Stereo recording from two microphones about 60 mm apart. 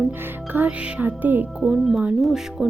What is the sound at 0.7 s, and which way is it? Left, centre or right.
Speech, centre.